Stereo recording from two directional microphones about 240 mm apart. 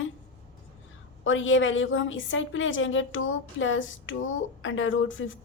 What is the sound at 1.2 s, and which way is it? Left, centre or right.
A woman's voice, left.